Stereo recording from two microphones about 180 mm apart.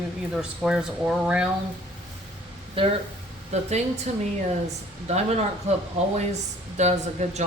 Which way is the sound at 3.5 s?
40° right (ahead or behind).